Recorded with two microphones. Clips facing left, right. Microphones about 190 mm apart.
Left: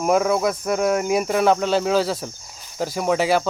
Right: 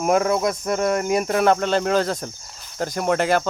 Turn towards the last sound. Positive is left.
turn(degrees=5)  # may be behind; listen again after turning